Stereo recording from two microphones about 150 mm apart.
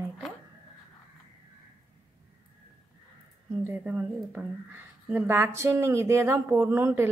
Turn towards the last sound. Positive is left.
turn(degrees=-15)  # may be behind; listen again after turning